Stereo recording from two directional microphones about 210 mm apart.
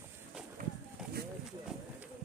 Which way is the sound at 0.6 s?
40° right (ahead or behind).